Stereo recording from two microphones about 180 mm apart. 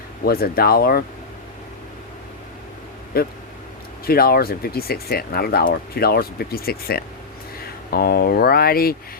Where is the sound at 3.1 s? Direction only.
55° left (ahead or behind).